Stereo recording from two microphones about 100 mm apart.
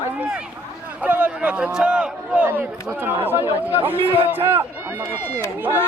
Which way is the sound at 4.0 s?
70° right (ahead or behind).